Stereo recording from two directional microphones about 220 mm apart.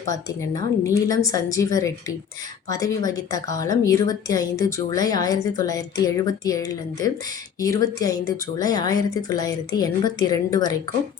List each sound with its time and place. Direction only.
0.1 s a woman's voice: 15° left (ahead or behind)